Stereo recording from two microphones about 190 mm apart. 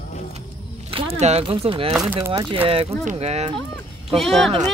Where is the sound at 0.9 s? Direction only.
30° right (ahead or behind).